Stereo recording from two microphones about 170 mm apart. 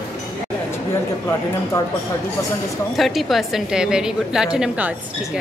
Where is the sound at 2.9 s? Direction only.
Centre (ahead or behind).